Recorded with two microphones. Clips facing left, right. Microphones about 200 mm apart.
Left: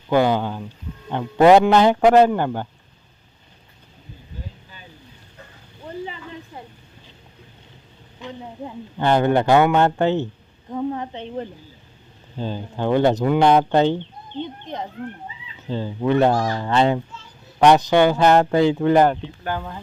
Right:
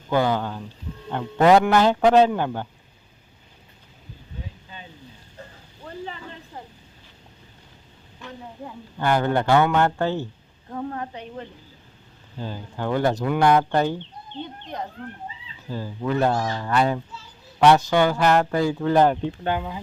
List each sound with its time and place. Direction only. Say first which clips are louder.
0.1 s a man's voice: left 4 dB; 15° left (ahead or behind)
8.2 s speech: left 4 dB; 20° left (ahead or behind)
10.7 s a sound: left 5 dB; 15° left (ahead or behind)
12.4 s speech: left 5 dB; 20° left (ahead or behind)
15.7 s speech: left 6 dB; 25° left (ahead or behind)
19.5 s speech: even; 10° right (ahead or behind)